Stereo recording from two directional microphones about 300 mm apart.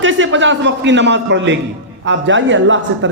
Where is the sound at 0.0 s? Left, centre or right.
Right.